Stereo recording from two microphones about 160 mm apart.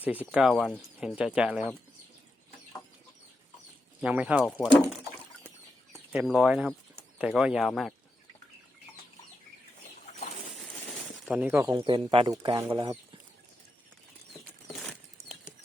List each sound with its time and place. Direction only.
0.3 s speech: 5° right (ahead or behind)
4.0 s speech: 10° right (ahead or behind)
5.9 s speech: centre (ahead or behind)
11.3 s speech: 10° right (ahead or behind)
11.6 s speech: 20° right (ahead or behind)